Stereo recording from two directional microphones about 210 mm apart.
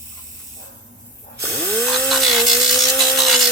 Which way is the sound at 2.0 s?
Centre (ahead or behind).